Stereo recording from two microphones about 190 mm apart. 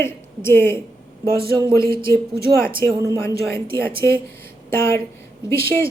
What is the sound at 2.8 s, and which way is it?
Speech, 15° left (ahead or behind).